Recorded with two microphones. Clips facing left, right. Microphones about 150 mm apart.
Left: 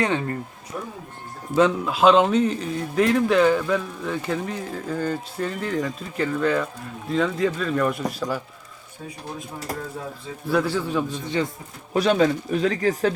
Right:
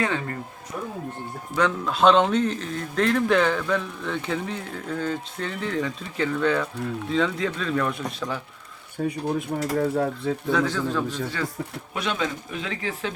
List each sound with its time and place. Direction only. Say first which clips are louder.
0.0 s speech: left 3 dB; 25° left (ahead or behind)
1.8 s speech: right 2 dB; 5° left (ahead or behind)
9.0 s speech: right 9 dB; 65° right (ahead or behind)
10.5 s a man's voice: left 3 dB; 10° left (ahead or behind)
11.9 s speech: left 9 dB; 40° left (ahead or behind)